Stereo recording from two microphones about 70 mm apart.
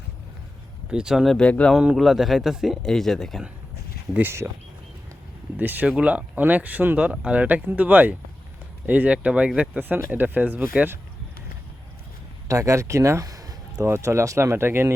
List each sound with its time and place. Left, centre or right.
0.9 s speech: centre
1.4 s speech: centre
1.7 s speech: centre
2.8 s speech: centre
4.2 s speech: right
5.5 s speech: right
12.5 s speech: right
13.2 s a sound: right
13.8 s speech: right